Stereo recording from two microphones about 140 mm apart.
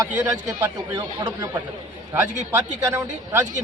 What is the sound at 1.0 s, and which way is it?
Speech, 30° right (ahead or behind).